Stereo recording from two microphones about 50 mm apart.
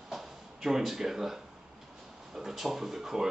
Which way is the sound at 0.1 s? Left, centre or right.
Centre.